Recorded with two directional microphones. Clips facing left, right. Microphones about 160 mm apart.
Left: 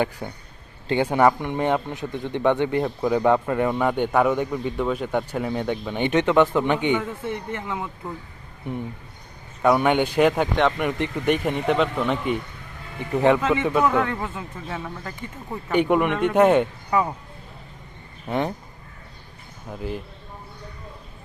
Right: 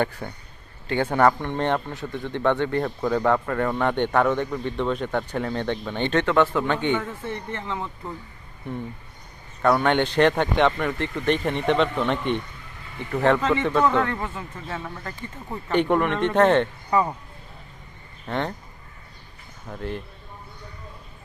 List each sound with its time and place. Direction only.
0.2 s speech: 15° left (ahead or behind)
9.6 s speech: 10° left (ahead or behind)
10.8 s a man's voice: 15° left (ahead or behind)
18.3 s speech: 10° left (ahead or behind)
19.6 s speech: 5° left (ahead or behind)